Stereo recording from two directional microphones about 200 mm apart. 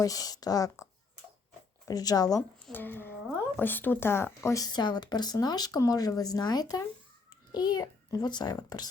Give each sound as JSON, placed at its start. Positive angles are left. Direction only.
{"t": 0.0, "sound": "speech", "side_deg": 20}
{"t": 1.9, "sound": "speech", "side_deg": 20}